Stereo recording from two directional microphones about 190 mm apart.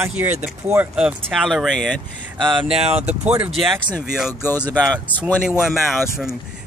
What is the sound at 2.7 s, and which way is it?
Speech, 30° right (ahead or behind).